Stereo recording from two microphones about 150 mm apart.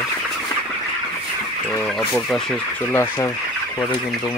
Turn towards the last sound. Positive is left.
turn(degrees=15)  # may be behind; listen again after turning